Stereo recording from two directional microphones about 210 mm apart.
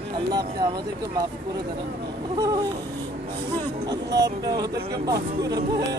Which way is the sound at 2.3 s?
15° right (ahead or behind).